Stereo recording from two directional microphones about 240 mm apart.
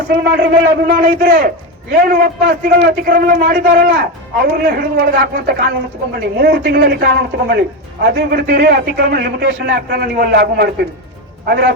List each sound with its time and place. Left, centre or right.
0.1 s a man's voice: right